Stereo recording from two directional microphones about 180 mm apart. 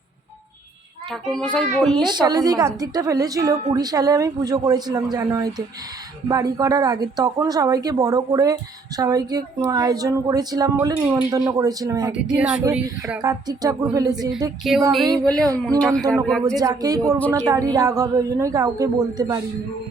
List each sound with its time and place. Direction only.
1.4 s speech: 5° left (ahead or behind)
2.0 s a woman's voice: 25° right (ahead or behind)
12.1 s speech: 5° right (ahead or behind)
13.2 s a woman's voice: 20° right (ahead or behind)
15.8 s speech: 5° left (ahead or behind)
16.6 s a woman's voice: 20° right (ahead or behind)